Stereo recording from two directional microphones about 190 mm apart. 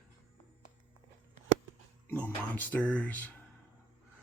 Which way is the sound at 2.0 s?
10° left (ahead or behind).